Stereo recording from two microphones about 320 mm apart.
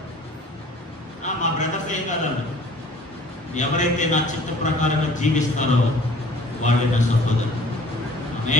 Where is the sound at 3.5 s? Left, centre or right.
Left.